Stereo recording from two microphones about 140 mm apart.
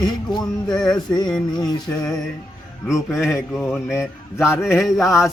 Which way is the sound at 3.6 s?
5° left (ahead or behind).